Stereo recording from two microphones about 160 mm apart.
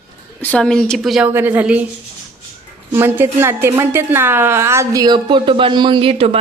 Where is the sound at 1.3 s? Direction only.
10° right (ahead or behind).